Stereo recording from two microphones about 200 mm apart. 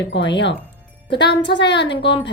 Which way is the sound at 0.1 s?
60° left (ahead or behind).